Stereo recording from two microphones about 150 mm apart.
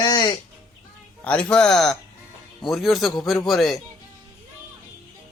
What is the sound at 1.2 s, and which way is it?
A man's voice, 10° left (ahead or behind).